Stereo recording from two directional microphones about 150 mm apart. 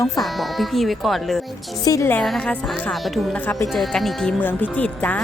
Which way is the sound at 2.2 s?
Centre (ahead or behind).